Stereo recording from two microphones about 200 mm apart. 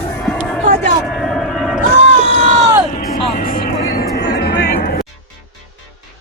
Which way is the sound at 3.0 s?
45° left (ahead or behind).